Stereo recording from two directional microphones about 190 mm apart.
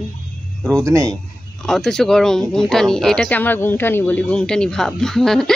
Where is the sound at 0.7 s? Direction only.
15° right (ahead or behind).